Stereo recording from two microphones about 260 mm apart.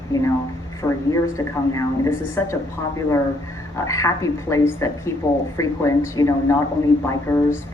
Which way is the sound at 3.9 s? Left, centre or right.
Centre.